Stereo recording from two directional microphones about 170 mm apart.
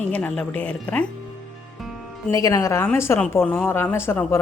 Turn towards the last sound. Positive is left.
turn(degrees=15)  # may be behind; listen again after turning